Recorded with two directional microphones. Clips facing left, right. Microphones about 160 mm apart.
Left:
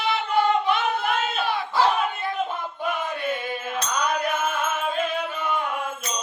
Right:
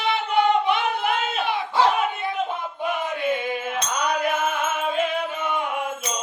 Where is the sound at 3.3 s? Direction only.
20° right (ahead or behind).